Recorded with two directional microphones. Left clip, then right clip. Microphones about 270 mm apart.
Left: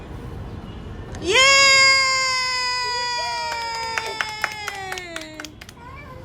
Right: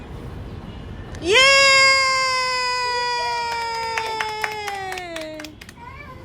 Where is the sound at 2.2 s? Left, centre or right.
Centre.